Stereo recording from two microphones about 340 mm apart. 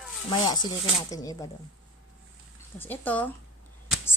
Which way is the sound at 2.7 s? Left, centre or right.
Centre.